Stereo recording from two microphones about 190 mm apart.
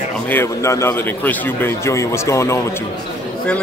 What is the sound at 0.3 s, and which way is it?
A man's voice, 15° left (ahead or behind).